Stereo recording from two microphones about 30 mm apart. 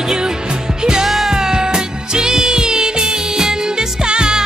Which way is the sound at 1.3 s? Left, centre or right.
Right.